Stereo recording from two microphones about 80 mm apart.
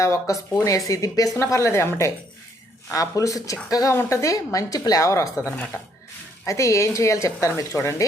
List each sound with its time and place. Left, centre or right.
0.0 s a woman's voice: left
6.4 s a woman's voice: left